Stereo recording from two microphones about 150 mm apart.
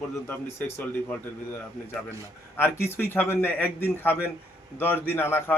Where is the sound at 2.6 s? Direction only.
15° left (ahead or behind).